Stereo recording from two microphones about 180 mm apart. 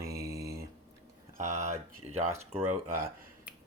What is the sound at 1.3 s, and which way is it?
Speech, 40° right (ahead or behind).